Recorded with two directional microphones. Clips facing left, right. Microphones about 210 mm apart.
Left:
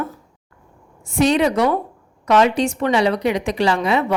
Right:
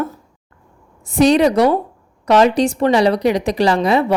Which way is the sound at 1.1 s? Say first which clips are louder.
Right 4 dB; 35° right (ahead or behind).